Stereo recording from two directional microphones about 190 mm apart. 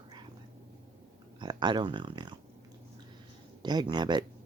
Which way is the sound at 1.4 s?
25° right (ahead or behind).